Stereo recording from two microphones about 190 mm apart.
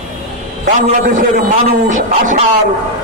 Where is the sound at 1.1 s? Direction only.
40° right (ahead or behind).